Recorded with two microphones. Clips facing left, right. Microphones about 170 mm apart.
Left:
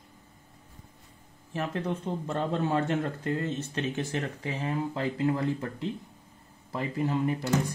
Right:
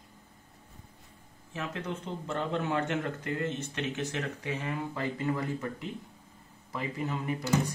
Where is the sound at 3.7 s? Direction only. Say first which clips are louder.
Left 3 dB; 35° left (ahead or behind).